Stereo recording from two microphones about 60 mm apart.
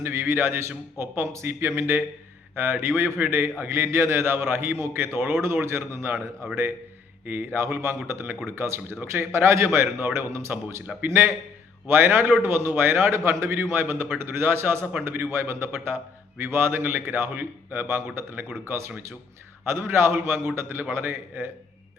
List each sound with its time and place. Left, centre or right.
0.0 s a man's voice: right
19.7 s a man's voice: right